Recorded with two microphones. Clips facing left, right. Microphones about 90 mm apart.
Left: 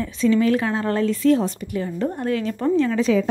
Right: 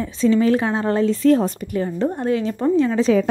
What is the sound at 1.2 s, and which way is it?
Speech, 45° right (ahead or behind).